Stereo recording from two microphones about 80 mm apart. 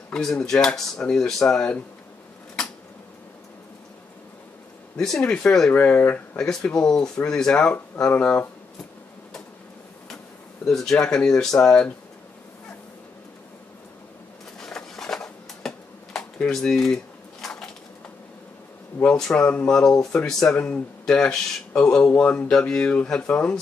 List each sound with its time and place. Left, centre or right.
0.1 s speech: centre
4.9 s speech: centre
5.7 s speech: left
6.3 s speech: centre
10.6 s speech: centre
14.6 s a sound: centre
19.3 s speech: centre
19.7 s speech: centre